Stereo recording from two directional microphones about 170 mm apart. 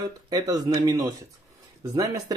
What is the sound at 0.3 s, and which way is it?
Speech, 20° right (ahead or behind).